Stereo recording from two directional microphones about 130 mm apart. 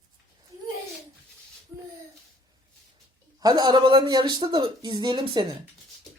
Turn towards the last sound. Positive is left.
turn(degrees=-35)  # may be behind; listen again after turning